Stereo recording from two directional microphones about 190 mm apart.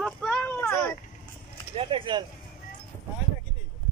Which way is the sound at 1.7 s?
25° right (ahead or behind).